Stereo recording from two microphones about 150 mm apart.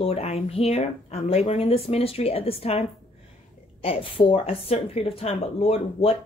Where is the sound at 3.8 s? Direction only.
35° left (ahead or behind).